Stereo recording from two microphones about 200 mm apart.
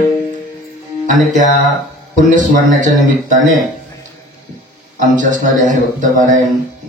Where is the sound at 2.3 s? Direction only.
40° right (ahead or behind).